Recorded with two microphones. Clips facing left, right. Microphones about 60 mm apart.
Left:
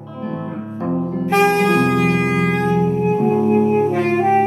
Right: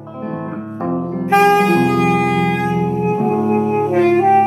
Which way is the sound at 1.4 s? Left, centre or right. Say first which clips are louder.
Right 3 dB; right.